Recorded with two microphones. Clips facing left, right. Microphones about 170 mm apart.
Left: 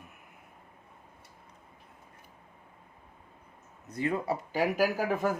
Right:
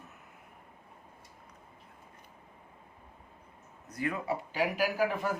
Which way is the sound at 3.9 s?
25° left (ahead or behind).